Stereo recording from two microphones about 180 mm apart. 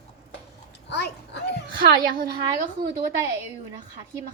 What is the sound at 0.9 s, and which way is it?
Speech, 70° left (ahead or behind).